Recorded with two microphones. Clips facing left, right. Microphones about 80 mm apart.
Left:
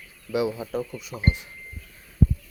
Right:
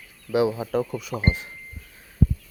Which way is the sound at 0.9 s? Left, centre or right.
Right.